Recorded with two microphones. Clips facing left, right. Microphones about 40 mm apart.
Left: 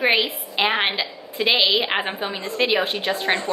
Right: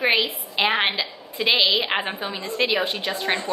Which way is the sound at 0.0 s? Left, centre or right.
Centre.